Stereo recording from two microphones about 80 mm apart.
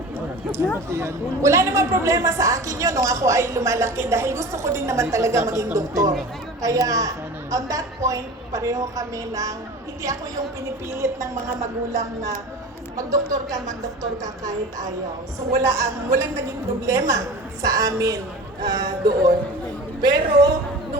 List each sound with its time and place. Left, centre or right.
0.9 s a woman's voice: right
13.0 s a woman's voice: right
18.6 s speech: right